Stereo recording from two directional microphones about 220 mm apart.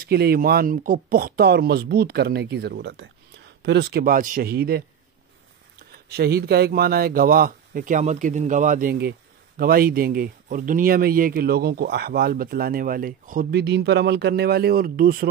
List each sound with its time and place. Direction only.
0.0 s speech: 45° right (ahead or behind)